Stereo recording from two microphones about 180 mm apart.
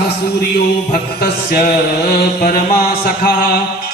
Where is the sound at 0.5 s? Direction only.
60° left (ahead or behind).